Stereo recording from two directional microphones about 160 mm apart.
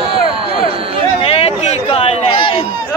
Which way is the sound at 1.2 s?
40° left (ahead or behind).